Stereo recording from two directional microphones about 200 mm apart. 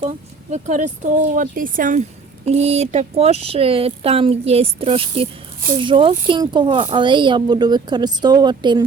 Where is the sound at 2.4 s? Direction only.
30° right (ahead or behind).